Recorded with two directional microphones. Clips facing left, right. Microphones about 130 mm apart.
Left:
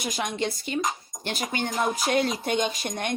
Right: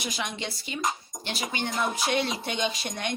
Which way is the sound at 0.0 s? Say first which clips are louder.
Left 5 dB; 45° left (ahead or behind).